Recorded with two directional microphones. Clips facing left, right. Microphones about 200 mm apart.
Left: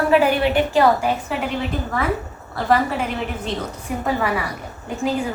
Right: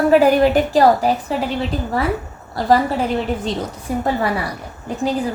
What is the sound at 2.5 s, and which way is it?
A woman's voice, 35° right (ahead or behind).